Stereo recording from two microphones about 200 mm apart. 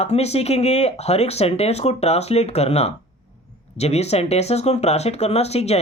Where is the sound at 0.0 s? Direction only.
30° left (ahead or behind).